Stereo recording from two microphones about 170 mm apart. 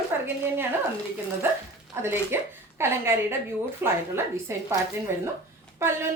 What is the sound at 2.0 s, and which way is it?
A woman's voice, 15° right (ahead or behind).